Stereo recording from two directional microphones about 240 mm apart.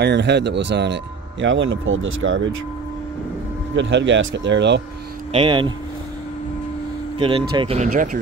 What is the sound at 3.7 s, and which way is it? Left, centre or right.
Speech, right.